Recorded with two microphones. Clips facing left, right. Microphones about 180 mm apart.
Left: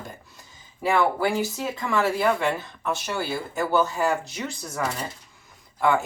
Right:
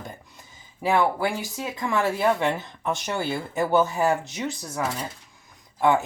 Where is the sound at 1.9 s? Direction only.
20° right (ahead or behind).